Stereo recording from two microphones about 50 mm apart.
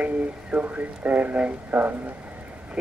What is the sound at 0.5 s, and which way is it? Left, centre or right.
Speech, right.